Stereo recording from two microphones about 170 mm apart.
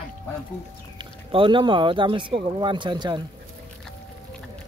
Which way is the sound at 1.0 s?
30° right (ahead or behind).